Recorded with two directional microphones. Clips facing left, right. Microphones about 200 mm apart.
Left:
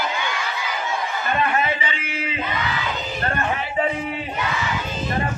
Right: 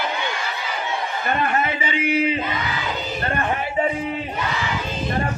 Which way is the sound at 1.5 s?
45° right (ahead or behind).